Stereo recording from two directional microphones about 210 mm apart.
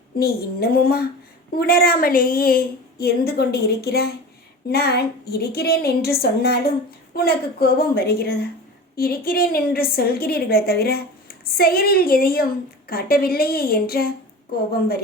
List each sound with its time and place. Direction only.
0.2 s a woman's voice: 50° left (ahead or behind)